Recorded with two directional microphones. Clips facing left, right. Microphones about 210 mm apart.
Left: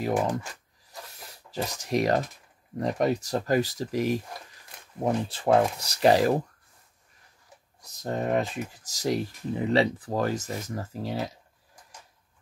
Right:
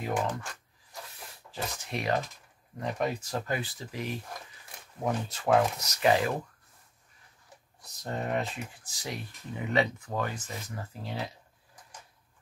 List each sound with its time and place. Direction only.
0.0 s speech: 40° left (ahead or behind)
1.5 s speech: 40° left (ahead or behind)
8.0 s speech: 40° left (ahead or behind)